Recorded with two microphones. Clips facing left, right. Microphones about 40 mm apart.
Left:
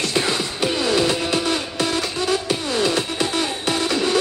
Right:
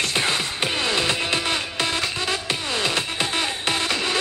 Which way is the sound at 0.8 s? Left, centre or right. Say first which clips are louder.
Left 4 dB; right.